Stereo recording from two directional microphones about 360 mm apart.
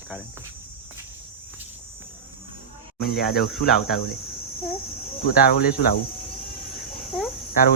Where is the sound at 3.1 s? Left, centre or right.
Centre.